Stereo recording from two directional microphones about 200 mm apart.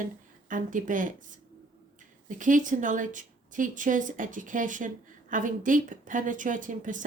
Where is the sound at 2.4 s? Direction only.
40° right (ahead or behind).